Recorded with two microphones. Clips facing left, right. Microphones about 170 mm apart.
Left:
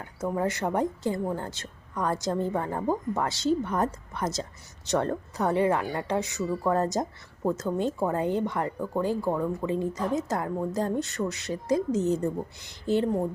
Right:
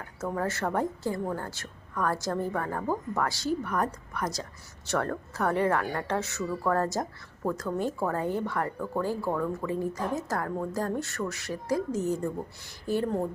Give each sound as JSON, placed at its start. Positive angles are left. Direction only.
{"t": 0.3, "sound": "a woman's voice", "side_deg": 15}